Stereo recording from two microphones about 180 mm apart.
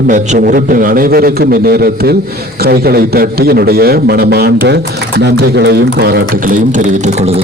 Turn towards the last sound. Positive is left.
turn(degrees=-45)  # may be behind; listen again after turning